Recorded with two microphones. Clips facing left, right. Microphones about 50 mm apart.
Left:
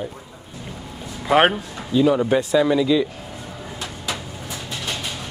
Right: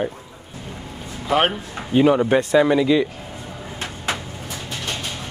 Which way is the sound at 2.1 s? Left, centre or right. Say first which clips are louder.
Right 2 dB; centre.